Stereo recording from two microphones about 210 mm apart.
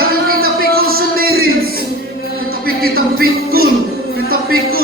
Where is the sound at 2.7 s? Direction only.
45° right (ahead or behind).